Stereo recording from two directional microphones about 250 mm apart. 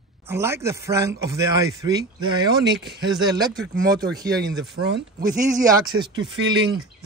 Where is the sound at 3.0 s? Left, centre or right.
Centre.